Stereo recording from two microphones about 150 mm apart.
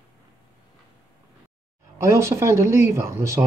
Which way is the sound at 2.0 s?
20° right (ahead or behind).